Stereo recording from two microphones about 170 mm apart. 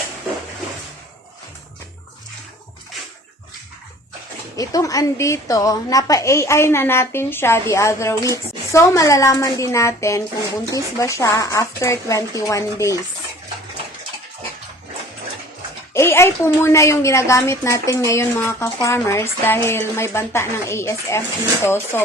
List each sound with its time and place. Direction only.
4.5 s a woman's voice: 20° left (ahead or behind)
15.9 s a woman's voice: 15° left (ahead or behind)